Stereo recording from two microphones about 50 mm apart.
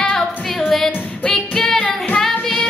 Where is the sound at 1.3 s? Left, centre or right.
Centre.